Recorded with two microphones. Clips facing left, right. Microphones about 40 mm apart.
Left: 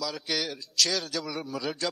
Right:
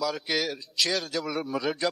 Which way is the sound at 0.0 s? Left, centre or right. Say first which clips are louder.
Right 4 dB; centre.